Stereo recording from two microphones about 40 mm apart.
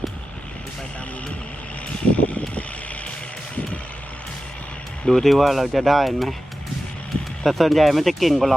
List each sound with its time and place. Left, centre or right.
2.1 s vehicle: left
5.0 s speech: centre
7.4 s speech: centre